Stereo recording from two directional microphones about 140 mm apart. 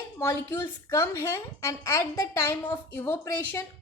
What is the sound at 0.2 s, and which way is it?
A woman's voice, 15° left (ahead or behind).